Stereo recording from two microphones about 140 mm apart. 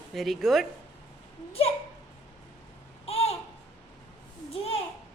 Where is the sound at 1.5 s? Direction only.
45° left (ahead or behind).